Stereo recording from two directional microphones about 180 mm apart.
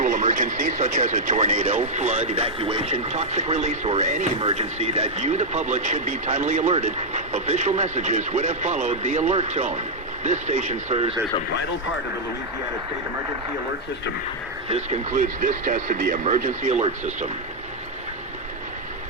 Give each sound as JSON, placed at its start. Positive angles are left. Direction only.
{"t": 0.0, "sound": "speech", "side_deg": -45}
{"t": 14.7, "sound": "speech", "side_deg": -45}